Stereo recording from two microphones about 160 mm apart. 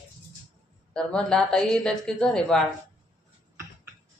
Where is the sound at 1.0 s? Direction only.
5° left (ahead or behind).